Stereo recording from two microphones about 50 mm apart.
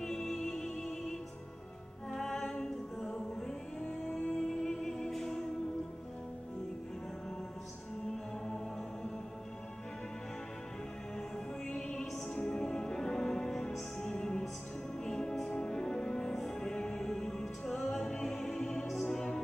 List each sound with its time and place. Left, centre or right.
0.0 s music: centre
11.1 s music: centre